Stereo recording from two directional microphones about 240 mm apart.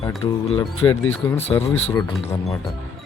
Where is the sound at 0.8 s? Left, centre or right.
Centre.